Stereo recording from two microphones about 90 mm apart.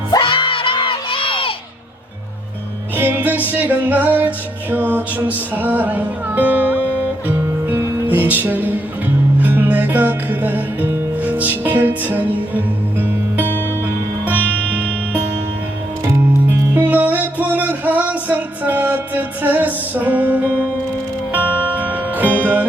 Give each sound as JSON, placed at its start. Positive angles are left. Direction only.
{"t": 0.2, "sound": "crowd", "side_deg": 70}
{"t": 2.9, "sound": "music", "side_deg": -20}
{"t": 13.4, "sound": "music", "side_deg": 25}
{"t": 13.8, "sound": "music", "side_deg": -20}
{"t": 16.5, "sound": "music", "side_deg": -20}
{"t": 21.4, "sound": "music", "side_deg": 20}
{"t": 21.8, "sound": "music", "side_deg": -20}